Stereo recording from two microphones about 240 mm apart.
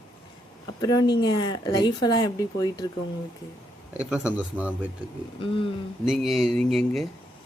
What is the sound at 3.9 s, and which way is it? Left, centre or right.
Speech, centre.